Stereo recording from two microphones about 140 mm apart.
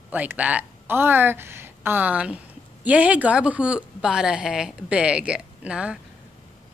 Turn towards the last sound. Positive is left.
turn(degrees=-5)  # may be behind; listen again after turning